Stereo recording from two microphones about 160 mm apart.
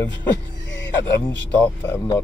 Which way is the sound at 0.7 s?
90° left.